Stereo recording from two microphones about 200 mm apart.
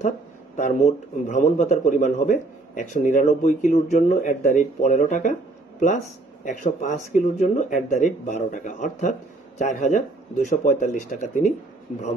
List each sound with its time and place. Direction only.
0.6 s a man's voice: 35° left (ahead or behind)
6.4 s a man's voice: 40° left (ahead or behind)